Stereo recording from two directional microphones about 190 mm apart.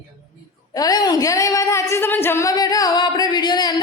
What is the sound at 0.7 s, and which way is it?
Speech, 20° left (ahead or behind).